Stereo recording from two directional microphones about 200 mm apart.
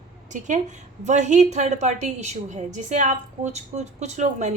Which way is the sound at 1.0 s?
35° right (ahead or behind).